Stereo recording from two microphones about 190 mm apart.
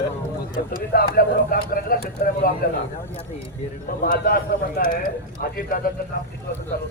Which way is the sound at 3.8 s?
55° left (ahead or behind).